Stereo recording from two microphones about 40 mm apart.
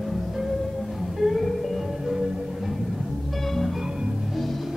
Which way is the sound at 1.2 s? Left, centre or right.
Centre.